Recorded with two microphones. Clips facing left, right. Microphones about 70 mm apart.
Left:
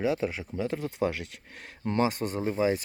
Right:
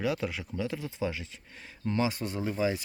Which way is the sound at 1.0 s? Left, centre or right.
Left.